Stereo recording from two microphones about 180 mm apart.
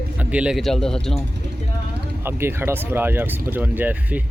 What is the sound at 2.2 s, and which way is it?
A man's voice, 15° right (ahead or behind).